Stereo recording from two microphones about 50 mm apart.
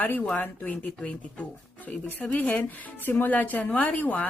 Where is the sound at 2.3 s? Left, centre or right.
Left.